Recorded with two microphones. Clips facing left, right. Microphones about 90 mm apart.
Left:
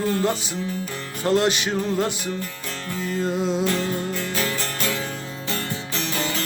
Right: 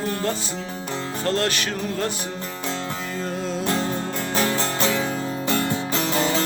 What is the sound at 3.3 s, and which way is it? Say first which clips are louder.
Music: left 4 dB; 20° left (ahead or behind).